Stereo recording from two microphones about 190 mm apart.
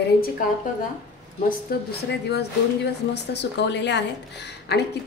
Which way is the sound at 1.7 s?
50° left (ahead or behind).